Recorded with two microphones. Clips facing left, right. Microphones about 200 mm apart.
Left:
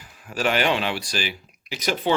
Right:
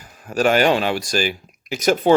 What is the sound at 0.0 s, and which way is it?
Speech, 45° right (ahead or behind).